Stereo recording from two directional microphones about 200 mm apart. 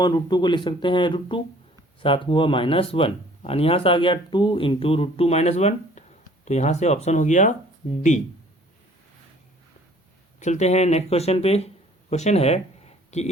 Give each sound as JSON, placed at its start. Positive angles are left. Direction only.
{"t": 0.0, "sound": "speech", "side_deg": 20}
{"t": 10.4, "sound": "speech", "side_deg": 35}